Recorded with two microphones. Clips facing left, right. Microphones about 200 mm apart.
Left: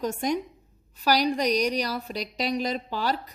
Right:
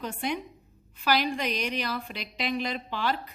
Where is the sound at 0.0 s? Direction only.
45° left (ahead or behind).